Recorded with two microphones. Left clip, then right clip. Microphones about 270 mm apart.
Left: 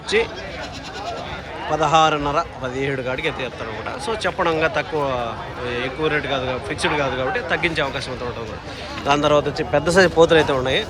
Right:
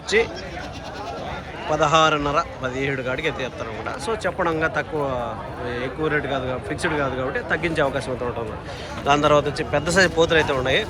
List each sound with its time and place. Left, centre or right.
0.1 s a man's voice: centre
1.7 s a man's voice: centre
9.0 s speech: centre